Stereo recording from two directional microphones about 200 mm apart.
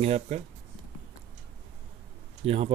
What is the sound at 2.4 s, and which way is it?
Speech, 30° right (ahead or behind).